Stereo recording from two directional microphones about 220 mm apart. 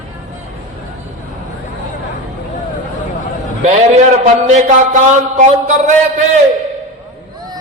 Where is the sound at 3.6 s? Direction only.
30° right (ahead or behind).